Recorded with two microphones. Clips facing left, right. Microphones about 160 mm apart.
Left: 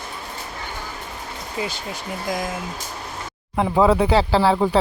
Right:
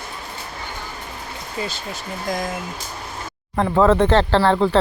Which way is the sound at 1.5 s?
15° left (ahead or behind).